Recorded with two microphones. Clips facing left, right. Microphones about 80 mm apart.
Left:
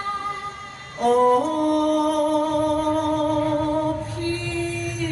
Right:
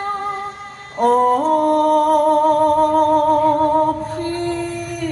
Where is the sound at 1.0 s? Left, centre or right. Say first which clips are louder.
Right 3 dB; right.